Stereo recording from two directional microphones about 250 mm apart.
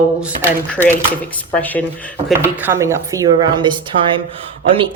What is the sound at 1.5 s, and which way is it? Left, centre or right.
Speech, centre.